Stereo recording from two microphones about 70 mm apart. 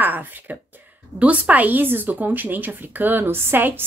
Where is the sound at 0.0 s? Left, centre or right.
Right.